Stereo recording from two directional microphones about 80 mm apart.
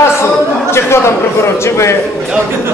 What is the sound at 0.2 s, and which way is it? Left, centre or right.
A man's voice, left.